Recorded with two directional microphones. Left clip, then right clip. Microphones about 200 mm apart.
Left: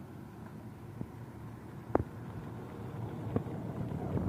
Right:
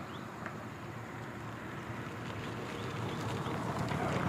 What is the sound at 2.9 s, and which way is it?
Clip-clop, 15° left (ahead or behind).